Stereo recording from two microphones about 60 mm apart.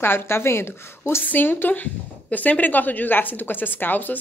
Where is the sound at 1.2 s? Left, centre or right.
Left.